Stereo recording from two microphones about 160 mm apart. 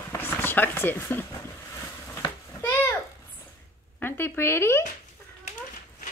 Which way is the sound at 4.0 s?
15° left (ahead or behind).